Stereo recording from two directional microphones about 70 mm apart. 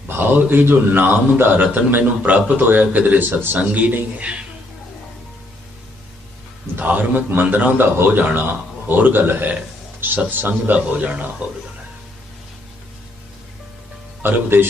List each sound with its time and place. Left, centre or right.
0.2 s a man's voice: right
6.7 s a man's voice: right
14.2 s a man's voice: right